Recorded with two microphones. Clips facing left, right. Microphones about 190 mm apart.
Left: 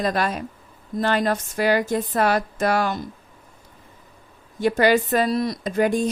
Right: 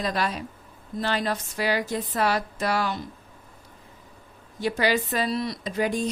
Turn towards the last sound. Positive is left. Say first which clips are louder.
# left 5 dB
turn(degrees=50)  # may be behind; listen again after turning